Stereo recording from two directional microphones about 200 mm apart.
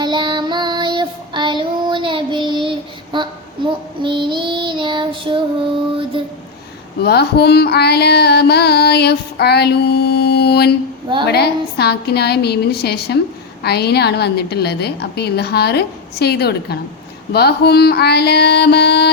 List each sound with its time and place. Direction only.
0.0 s child singing: 25° right (ahead or behind)
5.9 s a sound: 25° right (ahead or behind)
7.0 s female singing: 55° left (ahead or behind)
13.6 s a woman's voice: 55° left (ahead or behind)
17.3 s female singing: 55° left (ahead or behind)